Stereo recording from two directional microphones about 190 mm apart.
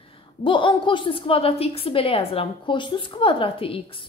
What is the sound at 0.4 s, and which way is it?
A woman's voice, 25° left (ahead or behind).